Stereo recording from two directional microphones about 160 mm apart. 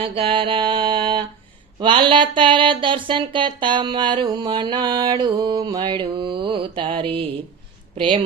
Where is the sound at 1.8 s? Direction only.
30° right (ahead or behind).